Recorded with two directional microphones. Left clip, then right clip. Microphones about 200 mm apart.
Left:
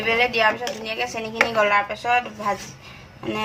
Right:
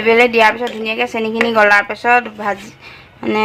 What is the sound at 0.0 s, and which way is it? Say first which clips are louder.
Speech: right 9 dB; 40° right (ahead or behind).